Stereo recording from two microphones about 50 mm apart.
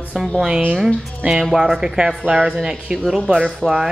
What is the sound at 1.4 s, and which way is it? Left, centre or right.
Speech, centre.